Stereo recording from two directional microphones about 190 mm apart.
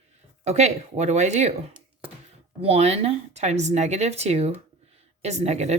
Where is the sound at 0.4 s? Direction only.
35° right (ahead or behind).